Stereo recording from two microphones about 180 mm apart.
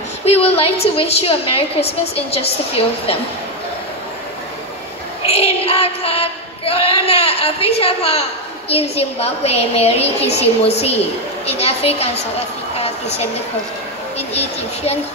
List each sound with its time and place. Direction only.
0.2 s a woman's voice: 35° left (ahead or behind)
5.2 s child singing: 35° left (ahead or behind)
11.4 s a woman's voice: 35° left (ahead or behind)